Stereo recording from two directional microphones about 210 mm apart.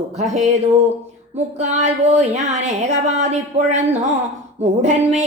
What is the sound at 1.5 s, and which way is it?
Speech, 35° right (ahead or behind).